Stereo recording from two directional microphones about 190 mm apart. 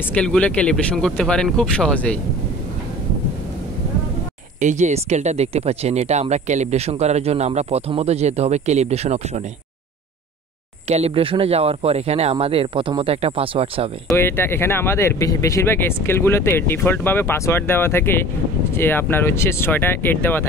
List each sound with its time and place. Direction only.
0.1 s speech: 5° left (ahead or behind)
4.6 s speech: 40° right (ahead or behind)
10.9 s speech: 35° right (ahead or behind)
14.1 s speech: 10° left (ahead or behind)